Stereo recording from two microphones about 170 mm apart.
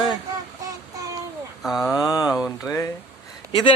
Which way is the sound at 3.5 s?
30° left (ahead or behind).